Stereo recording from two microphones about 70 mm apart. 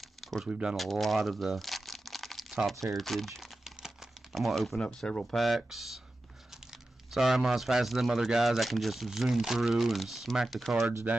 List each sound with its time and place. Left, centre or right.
0.0 s a sound: centre
0.5 s speech: centre
0.7 s crumpling: centre
4.7 s speech: centre
5.3 s speech: centre
11.1 s speech: centre